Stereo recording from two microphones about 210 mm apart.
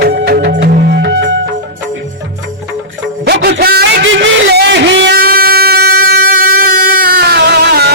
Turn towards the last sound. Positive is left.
turn(degrees=-50)  # may be behind; listen again after turning